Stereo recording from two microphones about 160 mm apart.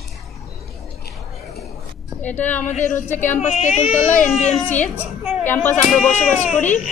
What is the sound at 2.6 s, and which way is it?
Speech, 50° left (ahead or behind).